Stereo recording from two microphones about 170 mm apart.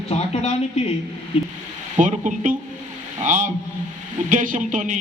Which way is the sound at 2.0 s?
50° right (ahead or behind).